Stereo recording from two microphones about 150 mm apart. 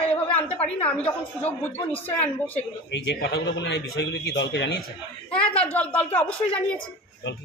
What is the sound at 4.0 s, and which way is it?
Speech, 90° left.